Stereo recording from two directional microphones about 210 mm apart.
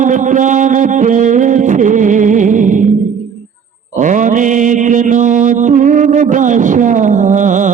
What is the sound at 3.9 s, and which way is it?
Mantra, 35° right (ahead or behind).